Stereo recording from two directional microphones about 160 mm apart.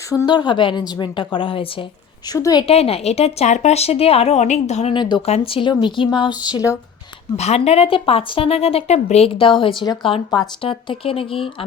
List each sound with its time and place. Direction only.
0.1 s a woman's voice: 25° left (ahead or behind)
2.6 s a woman's voice: 35° left (ahead or behind)
4.9 s a woman's voice: 30° left (ahead or behind)
7.3 s a woman's voice: 40° left (ahead or behind)